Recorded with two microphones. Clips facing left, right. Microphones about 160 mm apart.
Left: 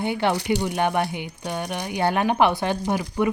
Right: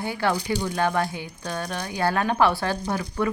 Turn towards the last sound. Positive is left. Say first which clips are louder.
# left 3 dB
turn(degrees=20)  # may be behind; listen again after turning